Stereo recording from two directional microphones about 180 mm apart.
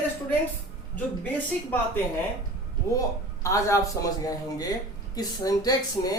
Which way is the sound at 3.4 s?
15° left (ahead or behind).